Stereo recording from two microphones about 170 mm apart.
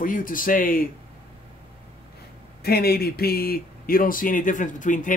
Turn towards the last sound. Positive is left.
turn(degrees=50)  # may be behind; listen again after turning